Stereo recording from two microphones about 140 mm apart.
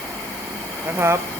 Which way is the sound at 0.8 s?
15° right (ahead or behind).